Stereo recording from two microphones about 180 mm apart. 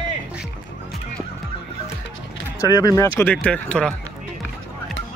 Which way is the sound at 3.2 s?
5° left (ahead or behind).